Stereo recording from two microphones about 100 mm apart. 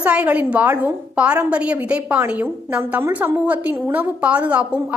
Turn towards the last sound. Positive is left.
turn(degrees=-15)  # may be behind; listen again after turning